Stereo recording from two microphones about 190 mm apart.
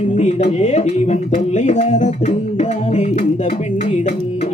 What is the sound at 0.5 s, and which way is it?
Music, 35° left (ahead or behind).